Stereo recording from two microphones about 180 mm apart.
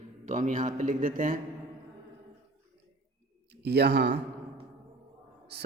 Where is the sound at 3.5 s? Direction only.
65° right (ahead or behind).